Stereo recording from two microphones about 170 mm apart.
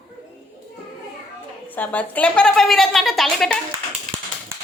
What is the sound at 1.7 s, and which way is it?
A woman's voice, 10° left (ahead or behind).